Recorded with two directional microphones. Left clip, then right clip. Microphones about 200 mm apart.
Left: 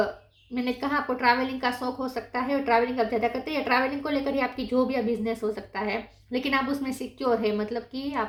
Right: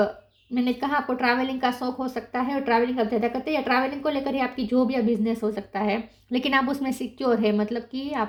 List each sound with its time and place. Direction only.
0.5 s a woman's voice: 40° right (ahead or behind)